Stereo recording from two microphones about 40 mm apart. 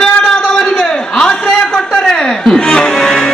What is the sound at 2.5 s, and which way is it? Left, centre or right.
Music, centre.